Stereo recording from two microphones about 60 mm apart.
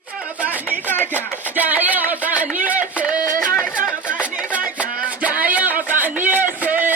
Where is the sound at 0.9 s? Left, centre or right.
Left.